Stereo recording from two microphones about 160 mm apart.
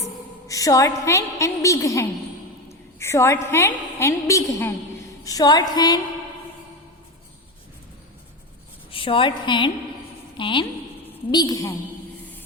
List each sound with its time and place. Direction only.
0.4 s a woman's voice: 20° left (ahead or behind)
8.9 s a woman's voice: 35° left (ahead or behind)